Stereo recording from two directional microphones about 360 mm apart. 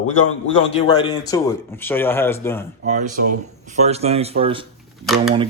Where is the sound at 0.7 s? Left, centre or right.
Centre.